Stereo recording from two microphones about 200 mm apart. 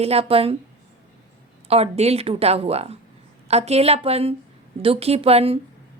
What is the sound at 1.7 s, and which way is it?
A woman's voice, 30° right (ahead or behind).